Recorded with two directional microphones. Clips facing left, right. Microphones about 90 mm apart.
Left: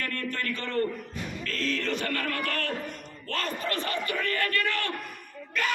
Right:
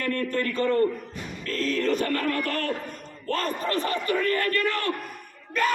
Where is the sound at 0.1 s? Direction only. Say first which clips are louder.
Right 6 dB; 35° right (ahead or behind).